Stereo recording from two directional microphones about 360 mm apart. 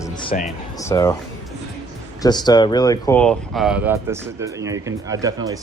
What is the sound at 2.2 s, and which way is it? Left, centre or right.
Speech, centre.